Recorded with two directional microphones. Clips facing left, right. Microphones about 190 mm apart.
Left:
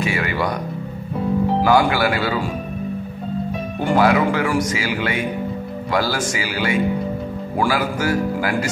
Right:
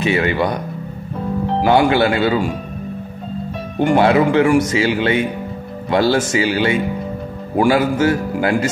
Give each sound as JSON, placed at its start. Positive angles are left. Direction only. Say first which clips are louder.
{"t": 0.0, "sound": "speech", "louder": "right 5 dB", "side_deg": -25}
{"t": 1.6, "sound": "speech", "louder": "right 5 dB", "side_deg": -25}
{"t": 3.8, "sound": "speech", "louder": "right 3 dB", "side_deg": -25}